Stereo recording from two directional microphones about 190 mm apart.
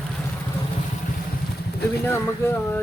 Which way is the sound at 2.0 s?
10° left (ahead or behind).